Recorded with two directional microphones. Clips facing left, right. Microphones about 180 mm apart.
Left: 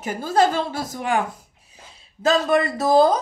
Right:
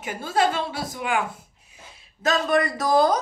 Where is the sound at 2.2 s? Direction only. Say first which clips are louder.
Left 3 dB; 30° left (ahead or behind).